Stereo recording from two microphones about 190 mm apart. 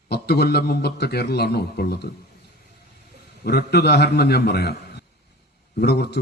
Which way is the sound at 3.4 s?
60° left (ahead or behind).